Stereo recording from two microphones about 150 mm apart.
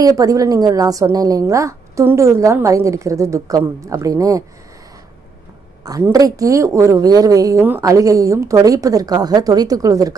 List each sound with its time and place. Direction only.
0.0 s a woman's voice: 25° right (ahead or behind)
5.8 s a woman's voice: 25° right (ahead or behind)